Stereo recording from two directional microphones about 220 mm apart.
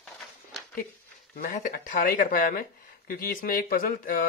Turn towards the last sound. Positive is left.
turn(degrees=40)  # may be behind; listen again after turning